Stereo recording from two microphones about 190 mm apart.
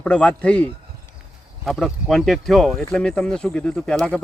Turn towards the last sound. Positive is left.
turn(degrees=5)  # may be behind; listen again after turning